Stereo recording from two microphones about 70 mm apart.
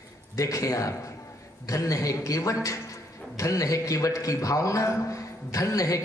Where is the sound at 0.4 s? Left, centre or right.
Left.